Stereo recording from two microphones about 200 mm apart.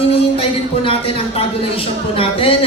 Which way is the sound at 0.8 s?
30° left (ahead or behind).